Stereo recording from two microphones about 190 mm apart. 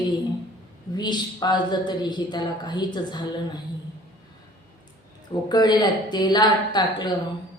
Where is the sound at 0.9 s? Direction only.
20° left (ahead or behind).